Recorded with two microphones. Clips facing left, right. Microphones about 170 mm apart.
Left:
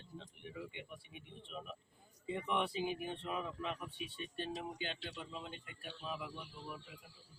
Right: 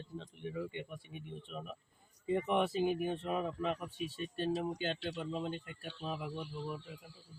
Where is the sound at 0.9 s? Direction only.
40° right (ahead or behind).